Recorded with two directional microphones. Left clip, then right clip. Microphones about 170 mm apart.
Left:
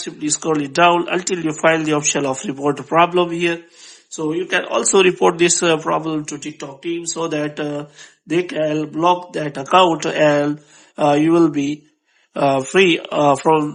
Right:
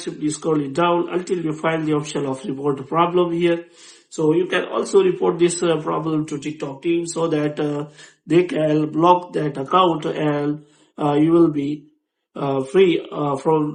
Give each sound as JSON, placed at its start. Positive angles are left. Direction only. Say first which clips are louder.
{"t": 0.3, "sound": "a man's voice", "louder": "left 5 dB", "side_deg": 40}
{"t": 4.7, "sound": "a man's voice", "louder": "left 4 dB", "side_deg": 50}
{"t": 5.5, "sound": "a man's voice", "louder": "left 4 dB", "side_deg": 40}